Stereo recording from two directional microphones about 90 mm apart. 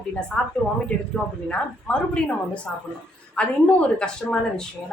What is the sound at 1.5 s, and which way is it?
Speech, 10° left (ahead or behind).